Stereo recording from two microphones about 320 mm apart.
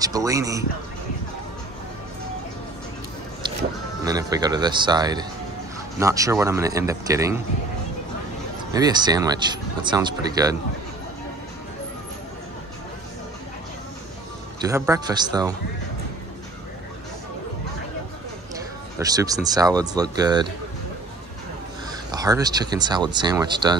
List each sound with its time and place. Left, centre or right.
0.0 s speech: centre
4.0 s speech: centre
8.7 s speech: centre
14.6 s speech: centre
18.5 s speech: centre
22.1 s speech: centre